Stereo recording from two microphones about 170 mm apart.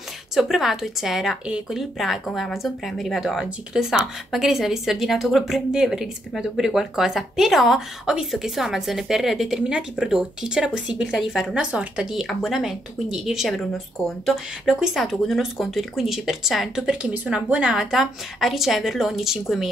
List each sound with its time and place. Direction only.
0.4 s speech: centre (ahead or behind)